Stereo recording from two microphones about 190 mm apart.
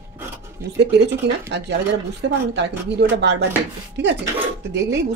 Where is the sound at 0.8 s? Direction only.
65° right (ahead or behind).